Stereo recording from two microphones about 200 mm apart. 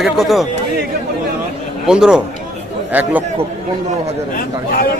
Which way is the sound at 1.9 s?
5° right (ahead or behind).